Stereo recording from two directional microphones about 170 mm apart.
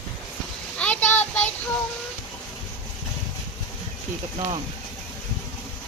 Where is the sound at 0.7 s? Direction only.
10° left (ahead or behind).